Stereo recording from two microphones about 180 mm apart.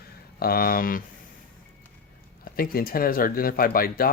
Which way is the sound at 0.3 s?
55° left (ahead or behind).